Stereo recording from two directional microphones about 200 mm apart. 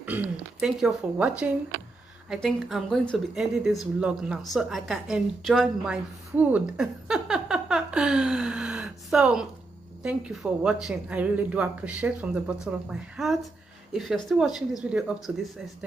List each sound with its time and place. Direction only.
0.0 s a woman's voice: 5° right (ahead or behind)